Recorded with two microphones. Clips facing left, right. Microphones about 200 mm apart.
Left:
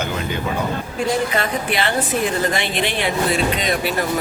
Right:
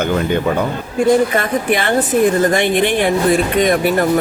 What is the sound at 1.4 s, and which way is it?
A woman's voice, 50° right (ahead or behind).